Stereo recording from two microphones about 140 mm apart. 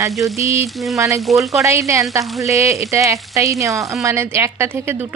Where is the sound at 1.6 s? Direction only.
20° right (ahead or behind).